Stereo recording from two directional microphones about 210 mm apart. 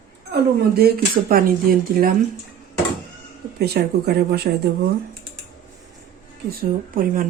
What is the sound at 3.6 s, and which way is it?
Speech, 50° right (ahead or behind).